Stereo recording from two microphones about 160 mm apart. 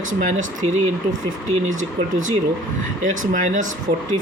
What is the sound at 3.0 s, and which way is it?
Speech, 55° right (ahead or behind).